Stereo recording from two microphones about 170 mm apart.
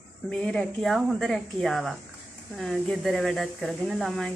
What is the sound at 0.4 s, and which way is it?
Speech, 5° left (ahead or behind).